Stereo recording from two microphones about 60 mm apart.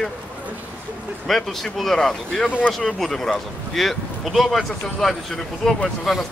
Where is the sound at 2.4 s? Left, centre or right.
Left.